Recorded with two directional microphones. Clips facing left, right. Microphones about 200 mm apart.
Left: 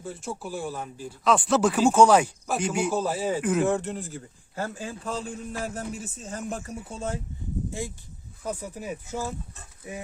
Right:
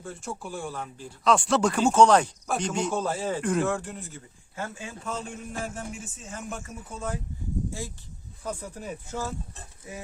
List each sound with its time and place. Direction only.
0.0 s speech: centre (ahead or behind)
3.7 s a man's voice: 25° left (ahead or behind)
8.4 s speech: 5° left (ahead or behind)